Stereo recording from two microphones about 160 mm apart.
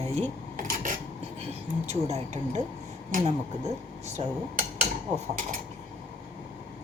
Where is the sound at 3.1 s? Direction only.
55° right (ahead or behind).